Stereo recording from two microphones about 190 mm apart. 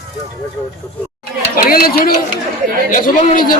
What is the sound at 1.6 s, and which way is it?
Speech, 50° left (ahead or behind).